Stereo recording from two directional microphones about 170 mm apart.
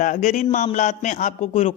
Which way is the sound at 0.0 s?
50° left (ahead or behind).